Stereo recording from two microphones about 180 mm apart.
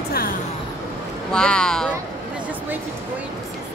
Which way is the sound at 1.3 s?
5° left (ahead or behind).